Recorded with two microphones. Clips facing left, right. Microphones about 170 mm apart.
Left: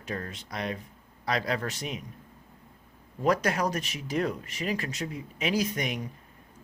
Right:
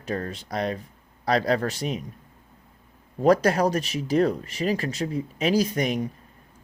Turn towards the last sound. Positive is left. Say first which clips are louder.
# right 6 dB
turn(degrees=-35)  # may be behind; listen again after turning